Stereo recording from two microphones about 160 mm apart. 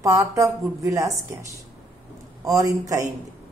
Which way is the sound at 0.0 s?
20° right (ahead or behind).